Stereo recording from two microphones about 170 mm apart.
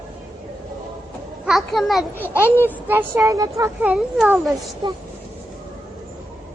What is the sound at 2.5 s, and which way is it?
Speech, 10° right (ahead or behind).